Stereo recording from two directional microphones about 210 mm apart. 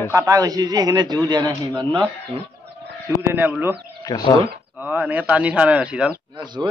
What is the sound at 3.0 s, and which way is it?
Speech, 10° right (ahead or behind).